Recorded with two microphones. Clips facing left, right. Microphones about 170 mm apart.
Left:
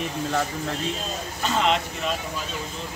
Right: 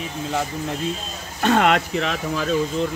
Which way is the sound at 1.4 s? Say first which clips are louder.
Right 6 dB; 60° right (ahead or behind).